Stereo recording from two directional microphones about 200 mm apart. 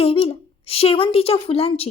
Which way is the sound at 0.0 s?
30° left (ahead or behind).